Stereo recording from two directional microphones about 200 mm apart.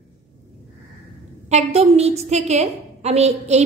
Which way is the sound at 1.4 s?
35° right (ahead or behind).